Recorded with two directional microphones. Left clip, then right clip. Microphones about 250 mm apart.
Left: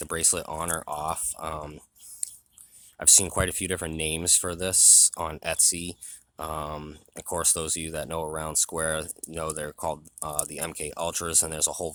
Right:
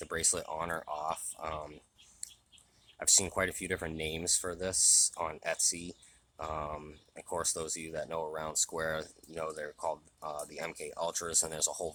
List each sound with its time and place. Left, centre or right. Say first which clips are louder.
0.0 s speech: left 6 dB; left
3.0 s speech: left 6 dB; left